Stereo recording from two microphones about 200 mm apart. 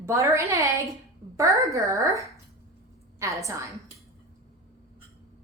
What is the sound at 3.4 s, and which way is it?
Speech, 15° right (ahead or behind).